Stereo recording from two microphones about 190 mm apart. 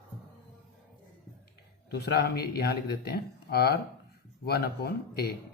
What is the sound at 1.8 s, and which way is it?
Speech, 55° left (ahead or behind).